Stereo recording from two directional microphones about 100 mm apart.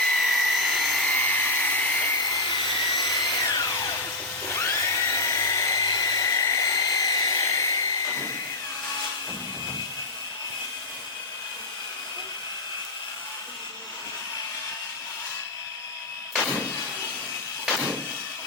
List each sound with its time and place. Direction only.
0.0 s helicopter: 5° left (ahead or behind)
1.0 s dental drill: 15° left (ahead or behind)
2.2 s a sound: 40° left (ahead or behind)
2.6 s helicopter: 55° left (ahead or behind)
2.9 s tools: 40° left (ahead or behind)
3.5 s a sound: 35° left (ahead or behind)
4.5 s dental drill: 30° left (ahead or behind)